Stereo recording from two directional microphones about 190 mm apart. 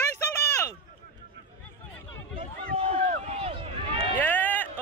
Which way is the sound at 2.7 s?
30° right (ahead or behind).